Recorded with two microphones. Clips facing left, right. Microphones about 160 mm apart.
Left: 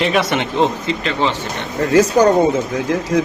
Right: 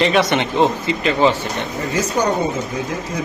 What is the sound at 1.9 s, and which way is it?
Speech, 90° left.